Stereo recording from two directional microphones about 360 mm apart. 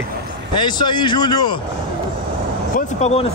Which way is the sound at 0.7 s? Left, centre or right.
Centre.